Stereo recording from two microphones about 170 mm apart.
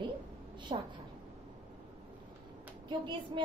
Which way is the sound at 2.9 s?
25° right (ahead or behind).